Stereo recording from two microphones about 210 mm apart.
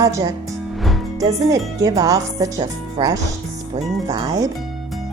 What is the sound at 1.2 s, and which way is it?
Speech, 15° right (ahead or behind).